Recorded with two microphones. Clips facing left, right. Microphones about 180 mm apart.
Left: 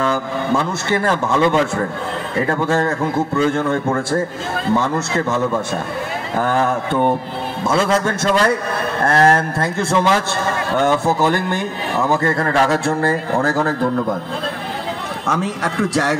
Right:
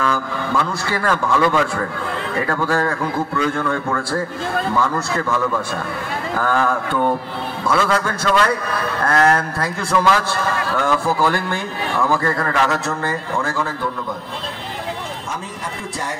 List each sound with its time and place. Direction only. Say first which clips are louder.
0.0 s a man's voice: left 2 dB; 25° left (ahead or behind); by 14.0 s 45° left (ahead or behind)
15.2 s speech: left 8 dB; 80° left